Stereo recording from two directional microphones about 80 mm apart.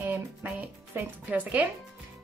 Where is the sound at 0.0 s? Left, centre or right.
Right.